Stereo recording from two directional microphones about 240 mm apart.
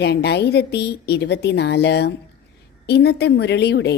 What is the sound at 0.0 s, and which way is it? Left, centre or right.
A woman's voice, left.